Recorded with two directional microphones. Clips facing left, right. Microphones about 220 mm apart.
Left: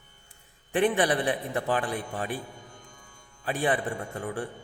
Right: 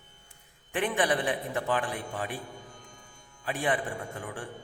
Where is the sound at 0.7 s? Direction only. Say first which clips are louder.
Left 4 dB; 35° left (ahead or behind).